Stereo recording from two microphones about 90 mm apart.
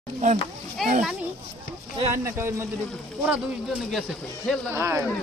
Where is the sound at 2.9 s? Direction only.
5° left (ahead or behind).